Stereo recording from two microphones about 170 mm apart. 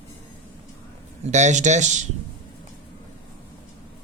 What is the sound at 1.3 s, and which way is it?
Speech, 45° right (ahead or behind).